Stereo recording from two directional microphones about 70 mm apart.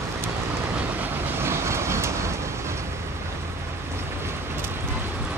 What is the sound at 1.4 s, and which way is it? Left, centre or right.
Vehicle, right.